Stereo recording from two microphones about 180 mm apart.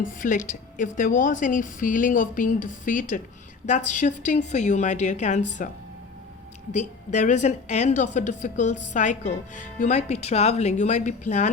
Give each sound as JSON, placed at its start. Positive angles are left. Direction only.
{"t": 0.0, "sound": "a woman's voice", "side_deg": 45}